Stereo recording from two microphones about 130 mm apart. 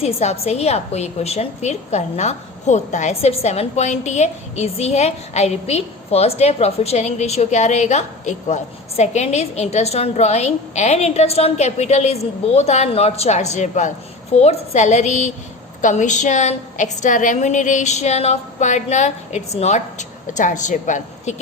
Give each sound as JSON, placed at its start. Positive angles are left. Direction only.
{"t": 0.0, "sound": "a woman's voice", "side_deg": 55}